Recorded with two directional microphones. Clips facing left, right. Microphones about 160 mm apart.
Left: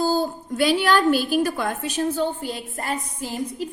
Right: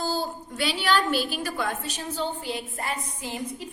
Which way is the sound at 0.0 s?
45° left (ahead or behind).